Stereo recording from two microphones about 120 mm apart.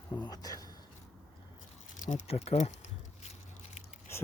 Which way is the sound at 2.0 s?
65° left (ahead or behind).